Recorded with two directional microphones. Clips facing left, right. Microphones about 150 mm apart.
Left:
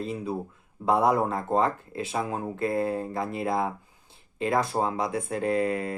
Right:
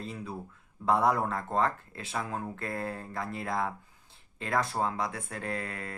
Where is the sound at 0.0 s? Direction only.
15° left (ahead or behind).